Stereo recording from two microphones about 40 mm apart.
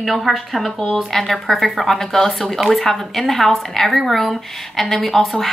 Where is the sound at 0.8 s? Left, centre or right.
Centre.